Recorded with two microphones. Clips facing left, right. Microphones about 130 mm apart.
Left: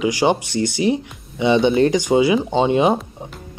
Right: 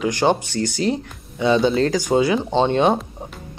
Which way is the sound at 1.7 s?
20° left (ahead or behind).